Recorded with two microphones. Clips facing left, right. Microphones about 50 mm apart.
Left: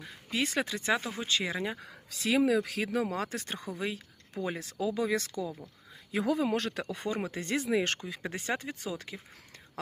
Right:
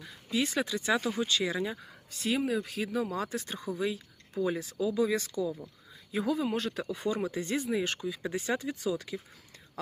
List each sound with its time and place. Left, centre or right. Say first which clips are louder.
0.0 s speech: right 1 dB; left
1.8 s speech: even; left
6.1 s speech: left 1 dB; left
6.8 s speech: right 2 dB; left
7.5 s speech: left 4 dB; left
7.9 s speech: right 4 dB; left